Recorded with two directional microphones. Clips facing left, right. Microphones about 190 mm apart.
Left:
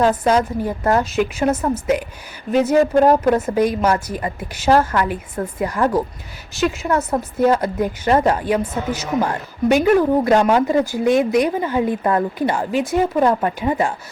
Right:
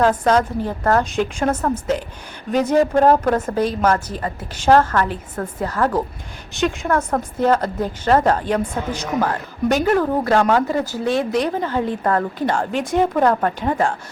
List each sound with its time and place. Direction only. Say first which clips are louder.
0.3 s speech: even; 10° left (ahead or behind)
6.5 s speech: left 1 dB; 5° left (ahead or behind)